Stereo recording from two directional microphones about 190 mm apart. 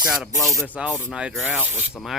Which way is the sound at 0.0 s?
5° right (ahead or behind).